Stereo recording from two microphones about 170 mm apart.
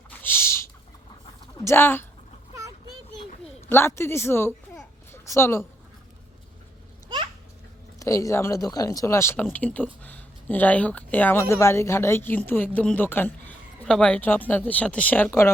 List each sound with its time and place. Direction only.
0.1 s bird: 10° left (ahead or behind)
1.5 s speech: 15° left (ahead or behind)
3.7 s speech: 15° left (ahead or behind)
7.9 s speech: 20° left (ahead or behind)